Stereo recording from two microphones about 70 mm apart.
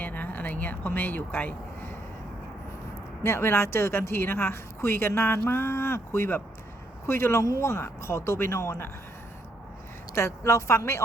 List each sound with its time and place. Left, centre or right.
0.0 s a sound: left
3.2 s speech: left
10.2 s a woman's voice: left